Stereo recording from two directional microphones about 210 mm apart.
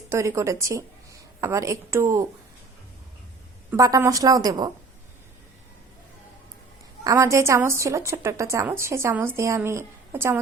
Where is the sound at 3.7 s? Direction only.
15° right (ahead or behind).